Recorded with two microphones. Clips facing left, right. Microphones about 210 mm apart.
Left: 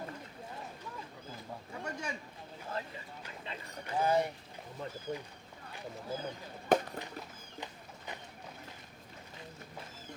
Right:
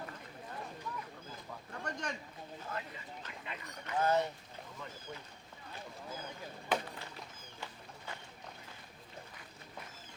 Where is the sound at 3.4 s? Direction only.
30° left (ahead or behind).